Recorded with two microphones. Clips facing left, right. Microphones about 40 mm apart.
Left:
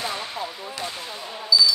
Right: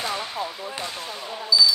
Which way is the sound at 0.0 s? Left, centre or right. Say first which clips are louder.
Right 1 dB; centre.